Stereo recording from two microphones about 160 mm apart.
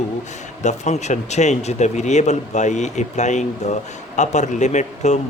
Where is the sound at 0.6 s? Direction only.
45° left (ahead or behind).